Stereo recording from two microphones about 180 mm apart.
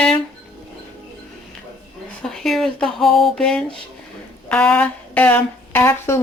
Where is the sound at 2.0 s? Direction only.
5° left (ahead or behind).